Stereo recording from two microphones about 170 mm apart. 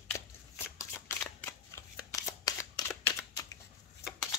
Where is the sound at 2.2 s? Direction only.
20° left (ahead or behind).